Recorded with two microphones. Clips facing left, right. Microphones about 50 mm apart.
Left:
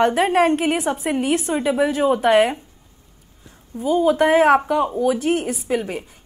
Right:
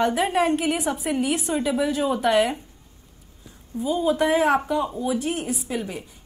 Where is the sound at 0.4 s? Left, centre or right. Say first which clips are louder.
Left 4 dB; left.